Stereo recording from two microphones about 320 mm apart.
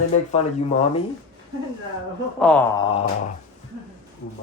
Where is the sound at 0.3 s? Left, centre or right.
Centre.